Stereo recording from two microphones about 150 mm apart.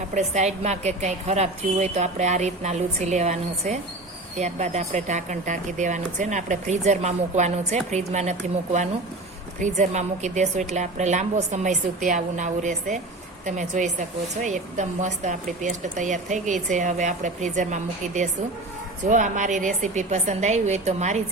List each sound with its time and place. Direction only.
0.1 s a woman's voice: 50° right (ahead or behind)